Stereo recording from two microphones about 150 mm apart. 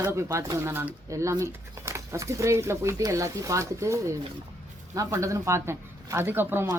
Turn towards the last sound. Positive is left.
turn(degrees=-15)  # may be behind; listen again after turning